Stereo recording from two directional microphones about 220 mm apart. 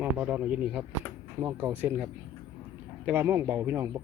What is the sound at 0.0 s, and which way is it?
A man's voice, 5° right (ahead or behind).